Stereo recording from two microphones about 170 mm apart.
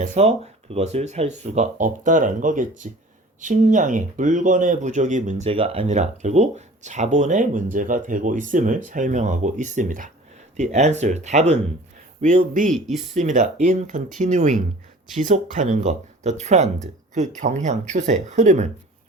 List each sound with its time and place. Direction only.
0.0 s speech: 40° right (ahead or behind)